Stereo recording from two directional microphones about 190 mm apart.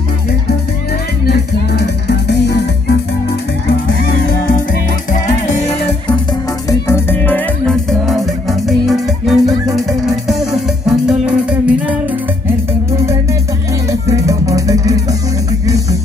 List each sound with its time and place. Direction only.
1.2 s music: 60° left (ahead or behind)
6.7 s music: 10° left (ahead or behind); by 11.7 s 5° right (ahead or behind)
12.9 s music: 15° right (ahead or behind)